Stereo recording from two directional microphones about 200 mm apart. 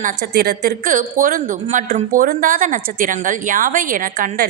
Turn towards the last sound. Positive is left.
turn(degrees=-45)  # may be behind; listen again after turning